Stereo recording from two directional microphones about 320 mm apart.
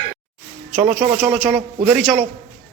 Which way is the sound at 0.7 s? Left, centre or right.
Centre.